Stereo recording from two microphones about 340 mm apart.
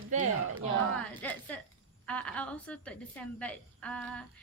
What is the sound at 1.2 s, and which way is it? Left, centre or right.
Speech, centre.